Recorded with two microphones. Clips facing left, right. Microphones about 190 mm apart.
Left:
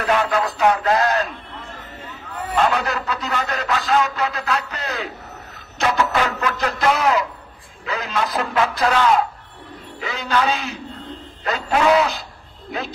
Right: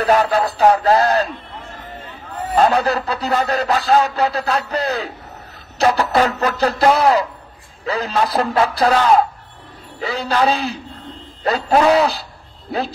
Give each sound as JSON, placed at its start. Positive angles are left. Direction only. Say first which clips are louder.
{"t": 0.0, "sound": "speech", "louder": "right 4 dB", "side_deg": -35}
{"t": 2.3, "sound": "speech", "louder": "right 4 dB", "side_deg": -35}